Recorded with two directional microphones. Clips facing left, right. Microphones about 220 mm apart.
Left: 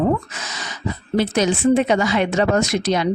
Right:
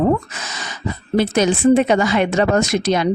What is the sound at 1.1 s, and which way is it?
Speech, 50° right (ahead or behind).